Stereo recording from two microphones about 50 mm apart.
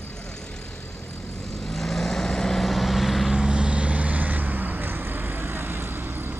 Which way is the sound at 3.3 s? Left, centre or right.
Centre.